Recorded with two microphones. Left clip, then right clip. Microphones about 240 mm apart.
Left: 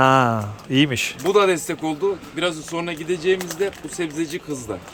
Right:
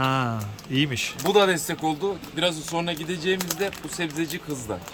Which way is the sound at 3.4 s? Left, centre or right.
Right.